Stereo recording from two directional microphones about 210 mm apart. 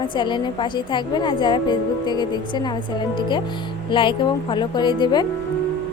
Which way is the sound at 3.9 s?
25° left (ahead or behind).